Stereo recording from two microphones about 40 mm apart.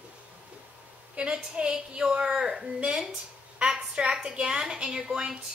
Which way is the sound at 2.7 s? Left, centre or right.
Right.